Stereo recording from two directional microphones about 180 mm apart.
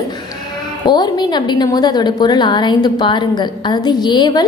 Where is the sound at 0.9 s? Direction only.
25° left (ahead or behind).